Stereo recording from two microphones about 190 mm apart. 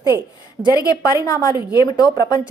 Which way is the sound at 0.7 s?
20° left (ahead or behind).